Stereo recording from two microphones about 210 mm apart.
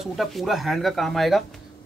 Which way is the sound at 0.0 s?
Centre (ahead or behind).